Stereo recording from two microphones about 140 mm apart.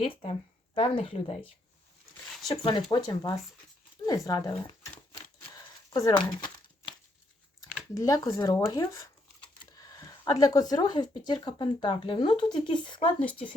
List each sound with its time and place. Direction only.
0.0 s speech: 45° left (ahead or behind)
5.1 s crumpling: 25° left (ahead or behind)
7.9 s speech: 25° left (ahead or behind)
13.1 s speech: 10° left (ahead or behind)